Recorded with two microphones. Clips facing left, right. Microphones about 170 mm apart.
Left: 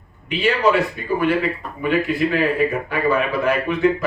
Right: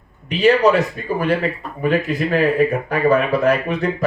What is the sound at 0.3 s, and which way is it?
Speech, 40° right (ahead or behind).